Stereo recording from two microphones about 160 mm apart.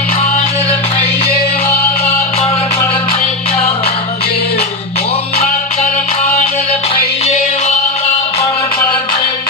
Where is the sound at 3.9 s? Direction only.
80° left.